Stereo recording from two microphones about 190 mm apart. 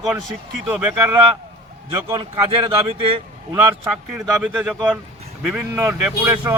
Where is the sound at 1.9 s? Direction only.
20° right (ahead or behind).